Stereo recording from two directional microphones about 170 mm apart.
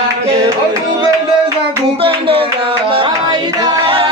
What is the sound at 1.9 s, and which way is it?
Music, 35° right (ahead or behind).